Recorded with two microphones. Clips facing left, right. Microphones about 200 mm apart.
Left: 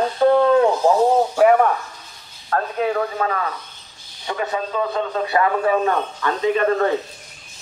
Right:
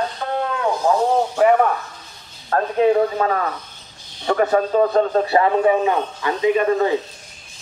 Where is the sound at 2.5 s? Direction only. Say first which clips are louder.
Right 5 dB; 30° right (ahead or behind).